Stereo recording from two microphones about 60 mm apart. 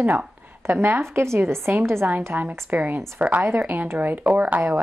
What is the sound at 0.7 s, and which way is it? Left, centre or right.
Speech, right.